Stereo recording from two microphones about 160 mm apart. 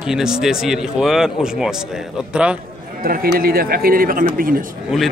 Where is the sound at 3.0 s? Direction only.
65° right (ahead or behind).